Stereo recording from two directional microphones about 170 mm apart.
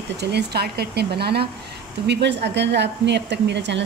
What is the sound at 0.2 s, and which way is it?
Speech, 75° right (ahead or behind).